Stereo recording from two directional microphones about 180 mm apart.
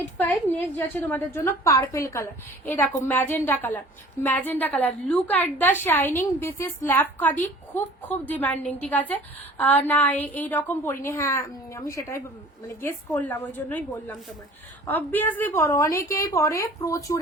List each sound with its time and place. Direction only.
0.2 s a woman's voice: 10° left (ahead or behind)